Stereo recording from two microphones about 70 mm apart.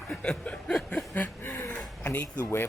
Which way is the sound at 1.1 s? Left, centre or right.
Left.